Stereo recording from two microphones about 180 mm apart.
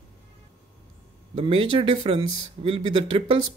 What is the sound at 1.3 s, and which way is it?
Speech, 30° right (ahead or behind).